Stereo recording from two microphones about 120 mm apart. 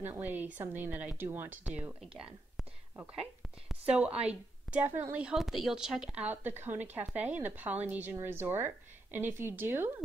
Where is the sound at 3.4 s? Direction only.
Centre (ahead or behind).